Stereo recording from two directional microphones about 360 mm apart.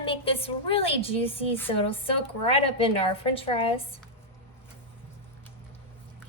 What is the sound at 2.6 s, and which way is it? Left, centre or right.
Speech, centre.